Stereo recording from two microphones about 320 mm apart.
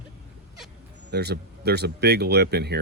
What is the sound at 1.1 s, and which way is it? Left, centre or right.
Speech, right.